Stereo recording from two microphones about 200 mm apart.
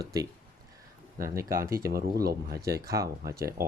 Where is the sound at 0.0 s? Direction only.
20° right (ahead or behind).